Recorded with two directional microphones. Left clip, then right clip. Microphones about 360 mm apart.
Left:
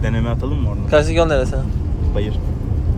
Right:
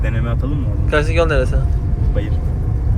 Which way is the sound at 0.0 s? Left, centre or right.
Left.